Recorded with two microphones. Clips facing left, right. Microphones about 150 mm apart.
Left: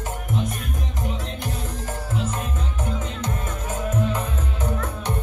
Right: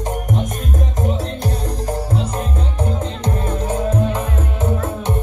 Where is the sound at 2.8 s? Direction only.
35° right (ahead or behind).